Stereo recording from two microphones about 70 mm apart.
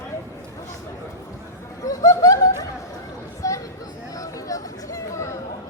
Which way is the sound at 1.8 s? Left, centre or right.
Left.